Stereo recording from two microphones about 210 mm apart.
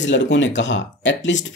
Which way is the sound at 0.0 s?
60° left (ahead or behind).